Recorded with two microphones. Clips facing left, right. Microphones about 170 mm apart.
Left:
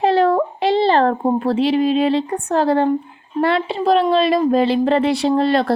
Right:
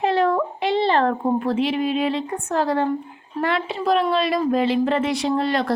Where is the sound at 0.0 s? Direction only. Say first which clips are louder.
Left 4 dB; 35° left (ahead or behind).